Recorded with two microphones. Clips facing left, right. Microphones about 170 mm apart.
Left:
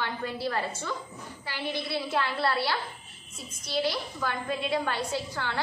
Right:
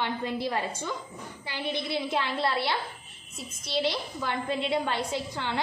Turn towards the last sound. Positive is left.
turn(degrees=-20)  # may be behind; listen again after turning